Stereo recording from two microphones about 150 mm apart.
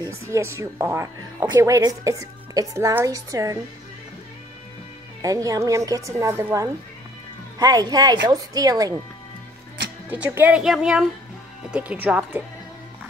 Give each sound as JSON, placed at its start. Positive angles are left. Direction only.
{"t": 0.3, "sound": "speech", "side_deg": -20}
{"t": 5.2, "sound": "speech", "side_deg": -20}
{"t": 10.0, "sound": "speech", "side_deg": -10}